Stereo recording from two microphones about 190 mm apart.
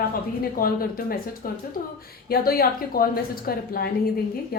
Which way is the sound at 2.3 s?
50° left (ahead or behind).